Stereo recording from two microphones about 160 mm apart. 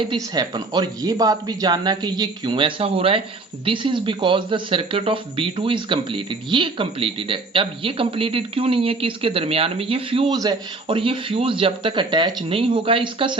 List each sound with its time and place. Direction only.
0.0 s speech: 30° right (ahead or behind)